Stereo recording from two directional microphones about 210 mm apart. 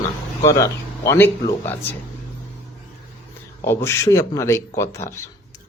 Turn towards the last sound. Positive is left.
turn(degrees=15)  # may be behind; listen again after turning